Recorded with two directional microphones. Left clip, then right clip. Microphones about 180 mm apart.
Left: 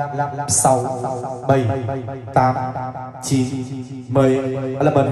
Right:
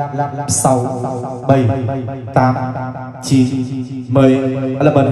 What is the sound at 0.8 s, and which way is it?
Music, 20° left (ahead or behind).